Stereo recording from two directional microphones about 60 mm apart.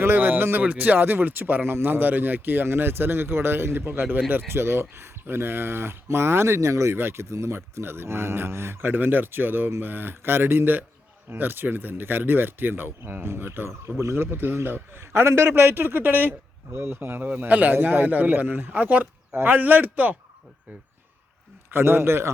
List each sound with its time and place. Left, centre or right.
0.0 s a sound: right
0.6 s speech: right
6.9 s speech: right
17.2 s a man's voice: right
21.7 s speech: right